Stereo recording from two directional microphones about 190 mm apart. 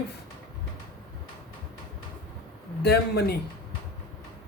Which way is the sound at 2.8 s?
60° left (ahead or behind).